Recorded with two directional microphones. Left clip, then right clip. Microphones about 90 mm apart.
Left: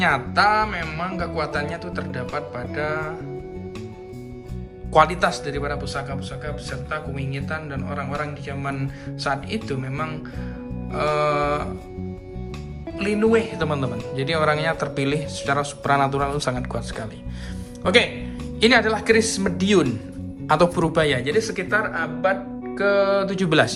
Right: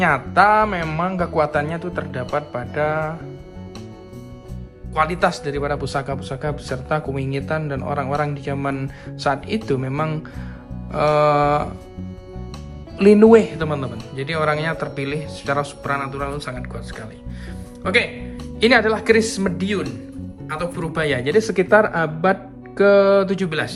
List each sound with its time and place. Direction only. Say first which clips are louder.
0.0 s a man's voice: right 3 dB; centre (ahead or behind)
5.0 s speech: right 2 dB; centre (ahead or behind)
5.7 s speech: right 5 dB; 25° right (ahead or behind)
6.1 s a man's voice: right 5 dB; 35° right (ahead or behind); by 11.7 s 15° right (ahead or behind)
13.0 s speech: right 9 dB; 30° right (ahead or behind)
13.6 s speech: even; 5° left (ahead or behind)
16.4 s speech: left 5 dB; 25° left (ahead or behind)
18.6 s speech: right 2 dB; centre (ahead or behind)
19.6 s speech: left 9 dB; 30° left (ahead or behind)
20.9 s speech: left 1 dB; centre (ahead or behind)
21.2 s speech: right 6 dB; 15° right (ahead or behind)
22.8 s a man's voice: right 6 dB; 5° right (ahead or behind)
23.5 s speech: left 6 dB; 25° left (ahead or behind)